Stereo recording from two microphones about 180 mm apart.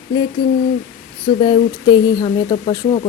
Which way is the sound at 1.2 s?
25° left (ahead or behind).